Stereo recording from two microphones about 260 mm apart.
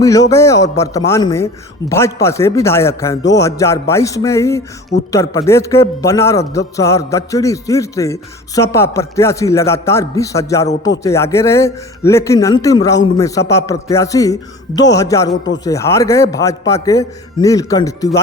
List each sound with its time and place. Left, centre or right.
0.0 s a man's voice: centre
15.3 s a man's voice: left
15.6 s a man's voice: centre